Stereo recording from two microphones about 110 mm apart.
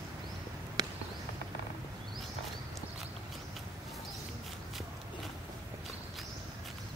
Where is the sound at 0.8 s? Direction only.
35° right (ahead or behind).